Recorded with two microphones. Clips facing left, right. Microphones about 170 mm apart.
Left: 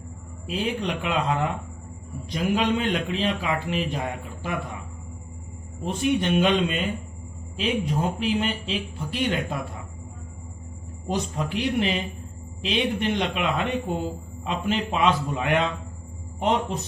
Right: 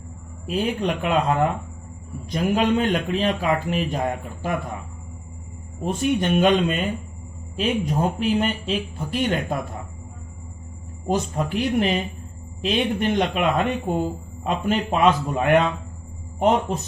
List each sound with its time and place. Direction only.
0.4 s speech: 50° right (ahead or behind)
5.8 s speech: 45° right (ahead or behind)
11.0 s speech: 50° right (ahead or behind)